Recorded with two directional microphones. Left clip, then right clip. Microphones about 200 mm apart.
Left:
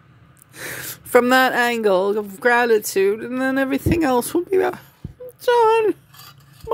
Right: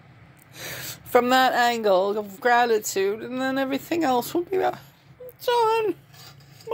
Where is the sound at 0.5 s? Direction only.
55° left (ahead or behind).